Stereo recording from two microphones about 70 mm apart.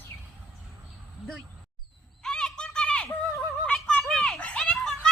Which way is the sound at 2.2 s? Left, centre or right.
Centre.